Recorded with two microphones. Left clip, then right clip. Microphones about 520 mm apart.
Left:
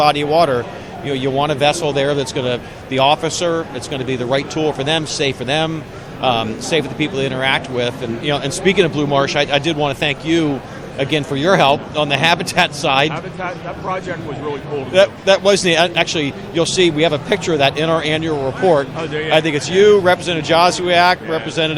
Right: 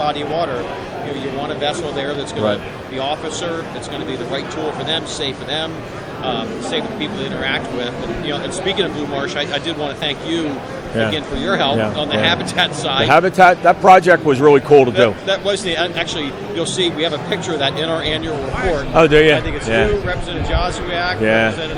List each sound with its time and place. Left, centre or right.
0.0 s speech: left
4.9 s speech: left
13.1 s a man's voice: right
14.9 s speech: left
18.9 s a man's voice: right
19.4 s speech: left